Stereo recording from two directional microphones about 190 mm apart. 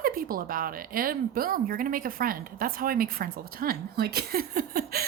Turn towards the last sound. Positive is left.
turn(degrees=-50)  # may be behind; listen again after turning